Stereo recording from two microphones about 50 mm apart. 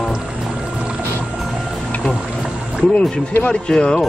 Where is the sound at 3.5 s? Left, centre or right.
Centre.